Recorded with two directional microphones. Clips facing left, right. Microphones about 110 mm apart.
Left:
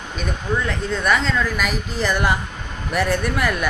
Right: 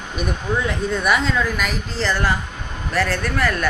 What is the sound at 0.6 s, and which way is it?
A woman's voice, 5° right (ahead or behind).